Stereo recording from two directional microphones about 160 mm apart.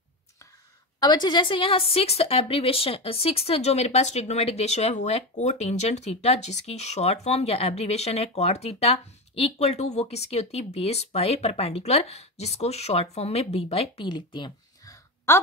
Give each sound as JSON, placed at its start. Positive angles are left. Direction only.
{"t": 0.9, "sound": "speech", "side_deg": 25}
{"t": 15.3, "sound": "a woman's voice", "side_deg": 15}